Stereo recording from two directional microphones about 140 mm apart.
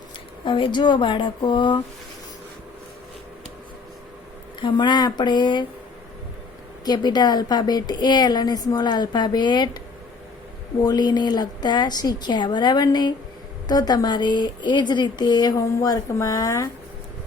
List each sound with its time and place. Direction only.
0.4 s a woman's voice: 35° left (ahead or behind)
4.6 s a woman's voice: 30° left (ahead or behind)
6.8 s a woman's voice: 30° left (ahead or behind)
10.8 s a woman's voice: 30° left (ahead or behind)